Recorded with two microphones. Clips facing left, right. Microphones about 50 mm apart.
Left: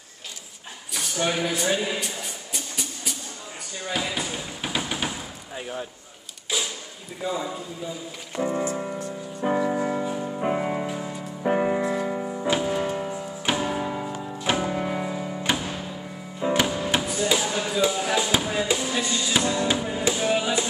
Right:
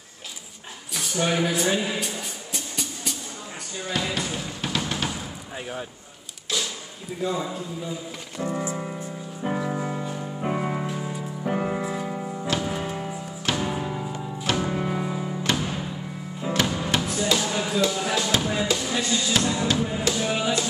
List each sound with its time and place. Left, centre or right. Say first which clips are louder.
0.9 s speech: right 1 dB; centre
2.5 s music: right 2 dB; centre
5.6 s speech: left 1 dB; centre
6.5 s a sound: even; centre
7.2 s music: even; centre
8.4 s music: left 3 dB; centre
8.7 s music: left 2 dB; centre
11.4 s music: left 4 dB; centre
11.8 s music: left 3 dB; centre
13.5 s music: left 1 dB; centre
17.7 s speech: left 1 dB; centre
18.1 s music: left 1 dB; centre
20.1 s music: left 4 dB; centre